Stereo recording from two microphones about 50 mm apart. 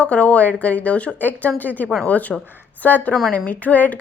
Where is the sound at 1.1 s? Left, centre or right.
Left.